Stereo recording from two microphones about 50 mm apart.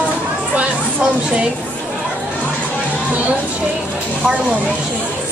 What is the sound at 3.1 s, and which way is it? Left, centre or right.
Speech, right.